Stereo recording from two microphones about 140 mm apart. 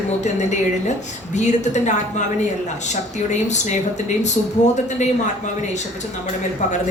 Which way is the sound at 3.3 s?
55° left (ahead or behind).